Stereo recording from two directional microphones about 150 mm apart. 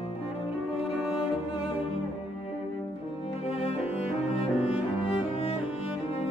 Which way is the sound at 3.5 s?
45° left (ahead or behind).